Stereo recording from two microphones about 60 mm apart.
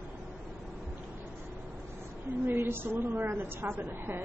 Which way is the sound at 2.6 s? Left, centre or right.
Right.